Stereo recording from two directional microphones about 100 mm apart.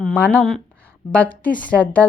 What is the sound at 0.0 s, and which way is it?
A woman's voice, 15° left (ahead or behind).